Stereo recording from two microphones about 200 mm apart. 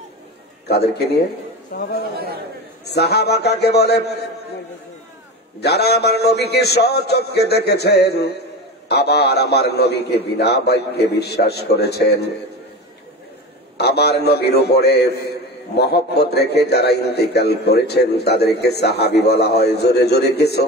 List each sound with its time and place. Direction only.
0.7 s a man's voice: 55° left (ahead or behind)
5.6 s a man's voice: 55° left (ahead or behind)
13.7 s a man's voice: 55° left (ahead or behind)